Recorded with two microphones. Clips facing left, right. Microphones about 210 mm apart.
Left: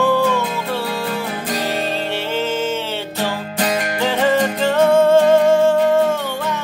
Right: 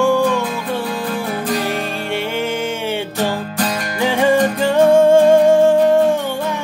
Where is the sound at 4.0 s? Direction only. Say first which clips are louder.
Right 4 dB; 15° right (ahead or behind).